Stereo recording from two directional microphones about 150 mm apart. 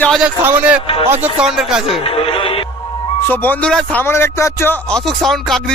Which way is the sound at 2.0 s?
40° left (ahead or behind).